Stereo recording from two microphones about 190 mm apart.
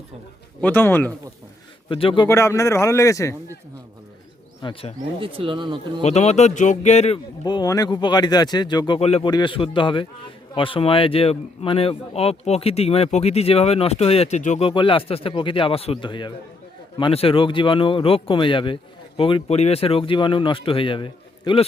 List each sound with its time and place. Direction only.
0.6 s a man's voice: 10° left (ahead or behind)
1.9 s speech: 30° left (ahead or behind)
2.2 s a man's voice: 15° left (ahead or behind)
4.6 s speech: 30° left (ahead or behind)
5.2 s speech: 30° right (ahead or behind)
6.0 s a man's voice: 35° left (ahead or behind)
7.4 s a man's voice: 20° left (ahead or behind)